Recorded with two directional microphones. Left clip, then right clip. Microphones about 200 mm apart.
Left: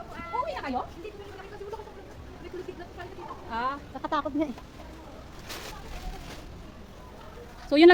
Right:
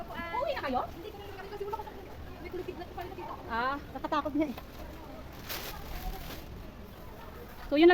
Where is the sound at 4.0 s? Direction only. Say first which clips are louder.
Left 3 dB; 20° left (ahead or behind).